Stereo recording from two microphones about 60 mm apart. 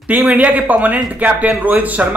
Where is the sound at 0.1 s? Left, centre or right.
Right.